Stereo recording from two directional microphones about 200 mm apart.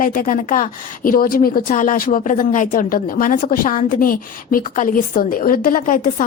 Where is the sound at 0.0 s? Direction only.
45° left (ahead or behind).